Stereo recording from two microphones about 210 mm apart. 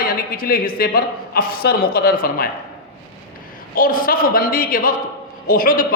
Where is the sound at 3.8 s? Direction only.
40° left (ahead or behind).